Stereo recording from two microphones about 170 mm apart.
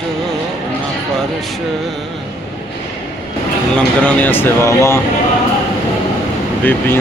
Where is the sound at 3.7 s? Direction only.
10° left (ahead or behind).